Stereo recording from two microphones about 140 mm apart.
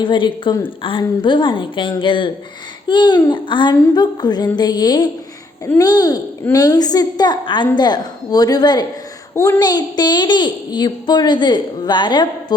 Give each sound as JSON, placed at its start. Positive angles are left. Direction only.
{"t": 0.0, "sound": "a woman's voice", "side_deg": 35}
{"t": 9.3, "sound": "a woman's voice", "side_deg": 20}
{"t": 9.6, "sound": "a woman's voice", "side_deg": 30}